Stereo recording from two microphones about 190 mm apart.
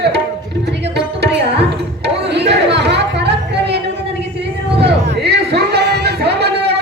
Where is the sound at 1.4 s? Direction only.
65° right (ahead or behind).